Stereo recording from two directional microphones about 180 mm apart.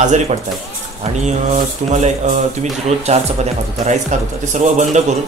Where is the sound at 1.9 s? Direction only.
40° right (ahead or behind).